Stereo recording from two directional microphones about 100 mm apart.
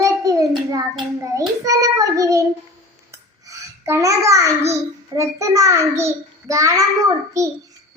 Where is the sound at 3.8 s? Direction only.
30° right (ahead or behind).